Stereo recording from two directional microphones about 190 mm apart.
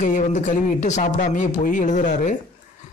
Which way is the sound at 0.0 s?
40° left (ahead or behind).